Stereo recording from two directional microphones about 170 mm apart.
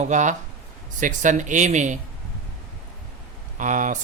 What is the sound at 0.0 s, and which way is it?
Speech, 45° right (ahead or behind).